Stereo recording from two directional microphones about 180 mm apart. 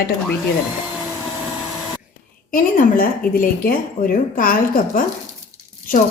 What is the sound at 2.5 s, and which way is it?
Speech, 50° left (ahead or behind).